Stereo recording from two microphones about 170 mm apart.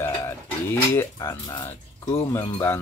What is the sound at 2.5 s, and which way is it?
Speech, 15° left (ahead or behind).